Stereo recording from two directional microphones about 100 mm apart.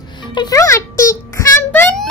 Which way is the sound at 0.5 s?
30° left (ahead or behind).